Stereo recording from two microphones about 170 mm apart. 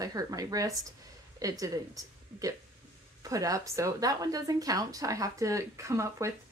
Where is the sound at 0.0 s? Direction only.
20° right (ahead or behind).